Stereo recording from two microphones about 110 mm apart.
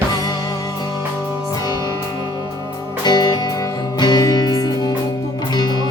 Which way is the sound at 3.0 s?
40° left (ahead or behind).